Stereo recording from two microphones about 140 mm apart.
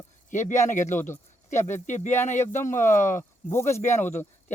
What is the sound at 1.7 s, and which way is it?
Speech, 60° left (ahead or behind).